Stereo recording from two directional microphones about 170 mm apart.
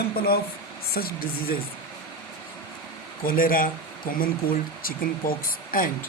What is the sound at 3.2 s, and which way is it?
Speech, 55° left (ahead or behind).